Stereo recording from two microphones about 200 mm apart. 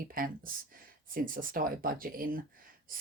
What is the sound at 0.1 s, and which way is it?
Speech, 45° right (ahead or behind).